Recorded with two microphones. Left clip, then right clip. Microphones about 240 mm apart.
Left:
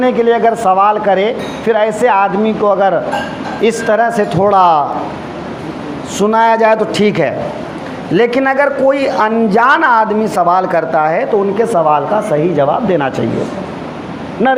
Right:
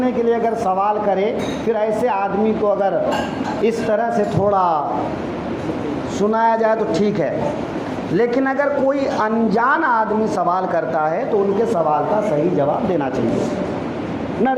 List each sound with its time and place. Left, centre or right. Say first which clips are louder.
0.0 s a man's voice: left 7 dB; left
6.1 s a man's voice: left 7 dB; left
14.4 s a man's voice: left 7 dB; left